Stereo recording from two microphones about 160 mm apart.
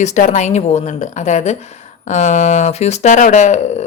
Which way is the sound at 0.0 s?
50° left (ahead or behind).